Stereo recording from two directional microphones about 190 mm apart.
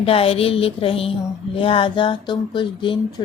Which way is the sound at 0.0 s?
30° left (ahead or behind).